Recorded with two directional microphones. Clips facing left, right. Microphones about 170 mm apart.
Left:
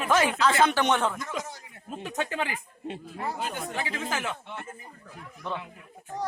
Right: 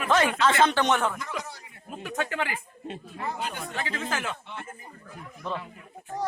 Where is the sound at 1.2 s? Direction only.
45° left (ahead or behind).